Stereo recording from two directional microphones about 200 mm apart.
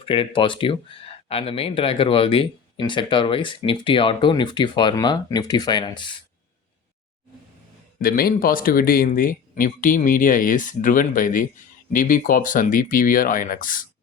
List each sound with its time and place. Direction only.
0.0 s speech: 25° left (ahead or behind)
7.9 s speech: 45° left (ahead or behind)